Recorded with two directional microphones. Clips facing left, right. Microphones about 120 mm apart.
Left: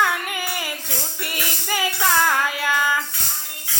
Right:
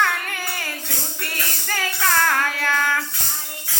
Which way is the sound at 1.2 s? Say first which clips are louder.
Left 1 dB; 15° left (ahead or behind).